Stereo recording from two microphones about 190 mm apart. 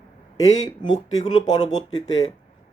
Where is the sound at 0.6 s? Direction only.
25° left (ahead or behind).